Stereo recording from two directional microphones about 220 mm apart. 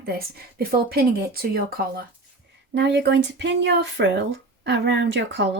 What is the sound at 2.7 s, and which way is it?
Speech, 50° right (ahead or behind).